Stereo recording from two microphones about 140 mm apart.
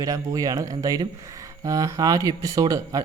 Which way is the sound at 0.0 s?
25° right (ahead or behind).